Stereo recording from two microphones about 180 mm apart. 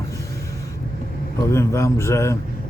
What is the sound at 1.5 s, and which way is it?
Speech, 15° left (ahead or behind).